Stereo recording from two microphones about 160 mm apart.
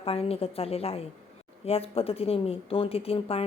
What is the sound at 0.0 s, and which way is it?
A woman's voice, 35° left (ahead or behind).